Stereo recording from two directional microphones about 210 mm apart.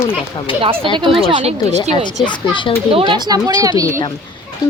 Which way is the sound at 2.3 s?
20° left (ahead or behind).